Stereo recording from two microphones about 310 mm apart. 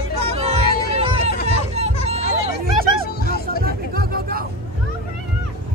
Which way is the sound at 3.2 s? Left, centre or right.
Left.